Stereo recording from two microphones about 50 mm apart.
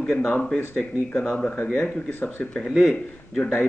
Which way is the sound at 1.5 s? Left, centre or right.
Left.